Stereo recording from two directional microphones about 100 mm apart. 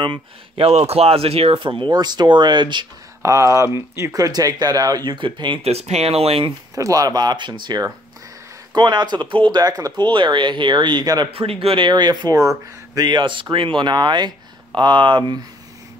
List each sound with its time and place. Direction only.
0.0 s speech: 65° right (ahead or behind)
3.2 s speech: 30° right (ahead or behind); by 5.6 s 55° right (ahead or behind)
5.6 s speech: 90° right
6.7 s speech: 35° right (ahead or behind)
11.3 s speech: 70° right (ahead or behind); by 15.4 s 50° right (ahead or behind)